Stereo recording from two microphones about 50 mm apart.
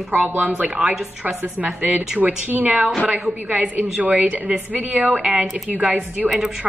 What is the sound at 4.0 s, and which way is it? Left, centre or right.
A woman's voice, right.